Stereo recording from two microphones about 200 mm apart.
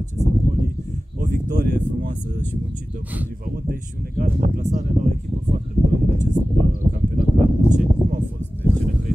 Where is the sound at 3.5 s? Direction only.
45° right (ahead or behind).